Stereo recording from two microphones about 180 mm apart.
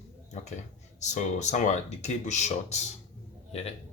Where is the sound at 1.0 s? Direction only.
40° left (ahead or behind).